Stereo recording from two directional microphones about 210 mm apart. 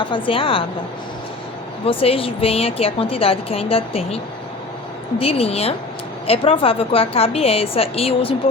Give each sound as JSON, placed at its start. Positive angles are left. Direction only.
{"t": 0.1, "sound": "a woman's voice", "side_deg": 25}
{"t": 1.8, "sound": "a woman's voice", "side_deg": 25}
{"t": 5.2, "sound": "a woman's voice", "side_deg": 30}